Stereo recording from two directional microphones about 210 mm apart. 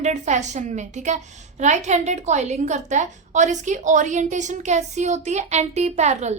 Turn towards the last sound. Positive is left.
turn(degrees=-30)  # may be behind; listen again after turning